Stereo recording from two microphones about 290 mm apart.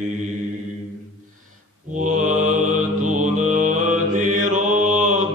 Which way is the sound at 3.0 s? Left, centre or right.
Right.